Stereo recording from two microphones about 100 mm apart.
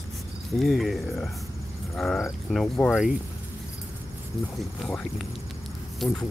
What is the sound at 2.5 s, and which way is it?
Cricket, 5° left (ahead or behind).